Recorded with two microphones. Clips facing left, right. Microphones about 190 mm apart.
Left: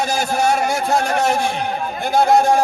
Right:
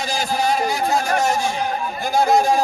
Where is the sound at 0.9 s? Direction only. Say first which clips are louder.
Left 3 dB; 60° left (ahead or behind).